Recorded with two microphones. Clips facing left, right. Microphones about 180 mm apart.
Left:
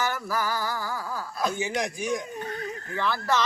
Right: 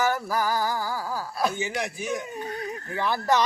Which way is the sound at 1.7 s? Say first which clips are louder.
Left 2 dB; 15° left (ahead or behind).